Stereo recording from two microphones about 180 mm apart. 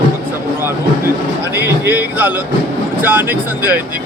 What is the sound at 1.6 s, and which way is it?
Speech, 10° right (ahead or behind).